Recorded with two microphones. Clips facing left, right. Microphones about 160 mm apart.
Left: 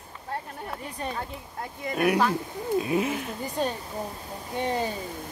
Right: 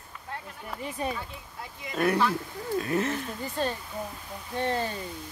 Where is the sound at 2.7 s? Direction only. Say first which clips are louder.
Left 2 dB; 15° left (ahead or behind).